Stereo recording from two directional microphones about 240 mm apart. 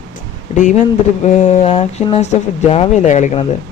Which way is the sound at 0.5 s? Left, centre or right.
Left.